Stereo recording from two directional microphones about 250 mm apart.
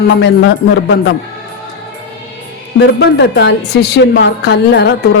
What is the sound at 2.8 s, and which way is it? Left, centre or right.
A woman's voice, left.